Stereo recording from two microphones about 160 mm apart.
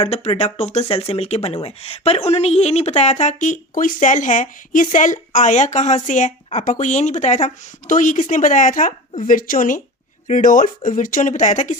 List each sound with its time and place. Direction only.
0.0 s speech: 40° left (ahead or behind)